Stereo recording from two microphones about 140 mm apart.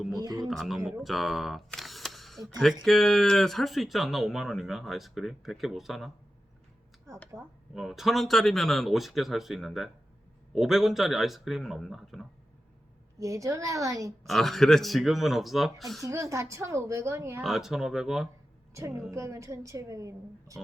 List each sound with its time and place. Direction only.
0.2 s a woman's voice: 30° right (ahead or behind)
0.4 s speech: centre (ahead or behind)
7.7 s speech: centre (ahead or behind)
13.1 s a woman's voice: 25° right (ahead or behind)
14.3 s speech: centre (ahead or behind)
16.0 s a woman's voice: 20° right (ahead or behind)
17.4 s speech: centre (ahead or behind)
18.7 s a woman's voice: 20° right (ahead or behind)